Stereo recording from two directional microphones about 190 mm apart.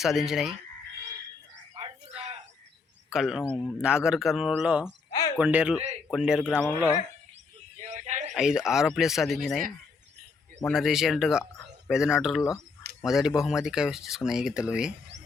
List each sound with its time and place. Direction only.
0.0 s speech: centre (ahead or behind)
1.7 s a sound: 30° right (ahead or behind)
3.1 s a man's voice: centre (ahead or behind)
7.8 s a sound: 40° right (ahead or behind)
8.3 s speech: 5° right (ahead or behind)
10.6 s speech: centre (ahead or behind)